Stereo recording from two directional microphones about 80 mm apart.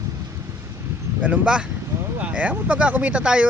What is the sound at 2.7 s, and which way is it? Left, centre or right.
Speech, centre.